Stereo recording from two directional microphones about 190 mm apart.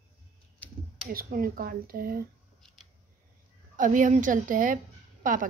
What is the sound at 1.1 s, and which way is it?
Speech, 50° right (ahead or behind).